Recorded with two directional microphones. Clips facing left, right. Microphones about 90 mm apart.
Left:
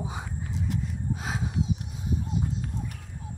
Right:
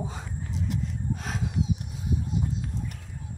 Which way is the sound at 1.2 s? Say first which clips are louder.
Left 1 dB; 10° left (ahead or behind).